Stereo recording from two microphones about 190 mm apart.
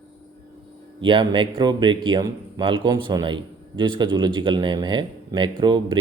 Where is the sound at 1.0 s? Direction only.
25° right (ahead or behind).